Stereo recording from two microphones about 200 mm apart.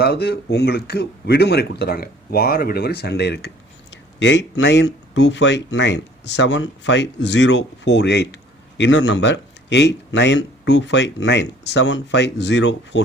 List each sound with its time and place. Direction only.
0.0 s speech: 55° left (ahead or behind)